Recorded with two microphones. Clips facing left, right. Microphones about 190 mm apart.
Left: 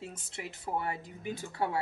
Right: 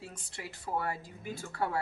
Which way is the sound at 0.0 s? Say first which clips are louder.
Left 3 dB; 20° left (ahead or behind).